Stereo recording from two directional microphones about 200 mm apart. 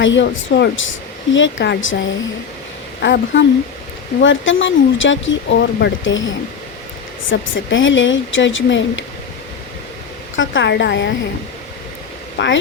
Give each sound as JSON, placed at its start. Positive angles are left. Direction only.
{"t": 0.0, "sound": "speech", "side_deg": 65}
{"t": 3.0, "sound": "speech", "side_deg": 60}
{"t": 10.3, "sound": "speech", "side_deg": 70}
{"t": 12.4, "sound": "speech", "side_deg": 65}